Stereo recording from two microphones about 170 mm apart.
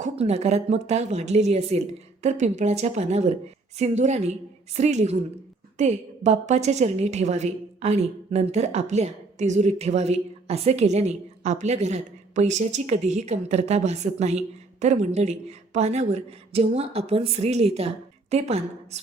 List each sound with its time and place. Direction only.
0.0 s a woman's voice: 40° right (ahead or behind)